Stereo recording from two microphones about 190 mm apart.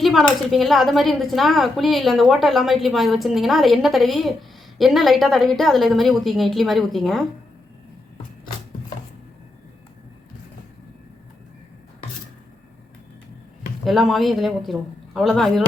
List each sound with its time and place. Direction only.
0.0 s speech: centre (ahead or behind)
13.8 s speech: centre (ahead or behind)